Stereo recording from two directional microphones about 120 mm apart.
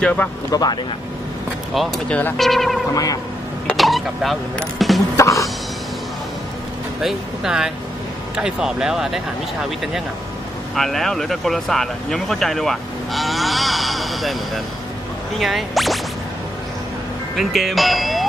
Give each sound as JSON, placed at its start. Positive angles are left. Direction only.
{"t": 0.0, "sound": "speech", "side_deg": 10}
{"t": 0.5, "sound": "speech", "side_deg": 35}
{"t": 2.0, "sound": "speech", "side_deg": 10}
{"t": 2.9, "sound": "speech", "side_deg": 30}
{"t": 3.7, "sound": "speech", "side_deg": 0}
{"t": 5.1, "sound": "music", "side_deg": 25}
{"t": 7.0, "sound": "speech", "side_deg": -5}
{"t": 10.7, "sound": "speech", "side_deg": 0}
{"t": 17.4, "sound": "speech", "side_deg": 0}